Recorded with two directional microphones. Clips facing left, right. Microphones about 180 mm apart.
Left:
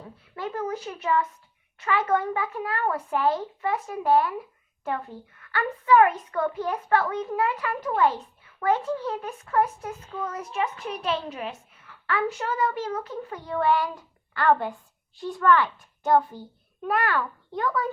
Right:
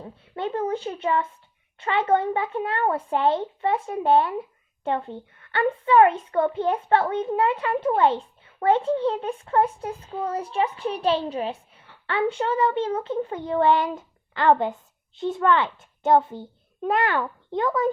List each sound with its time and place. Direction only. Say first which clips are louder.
0.0 s a child's voice: right 4 dB; 30° right (ahead or behind)